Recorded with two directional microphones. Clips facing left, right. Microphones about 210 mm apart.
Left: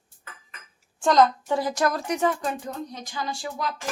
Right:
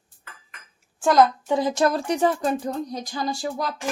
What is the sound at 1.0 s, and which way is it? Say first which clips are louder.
A woman's voice: right 2 dB; 10° right (ahead or behind).